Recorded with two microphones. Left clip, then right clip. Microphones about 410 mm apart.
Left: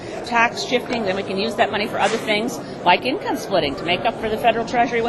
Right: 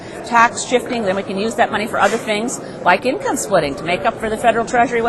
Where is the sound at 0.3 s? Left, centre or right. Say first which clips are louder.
Right 5 dB; right.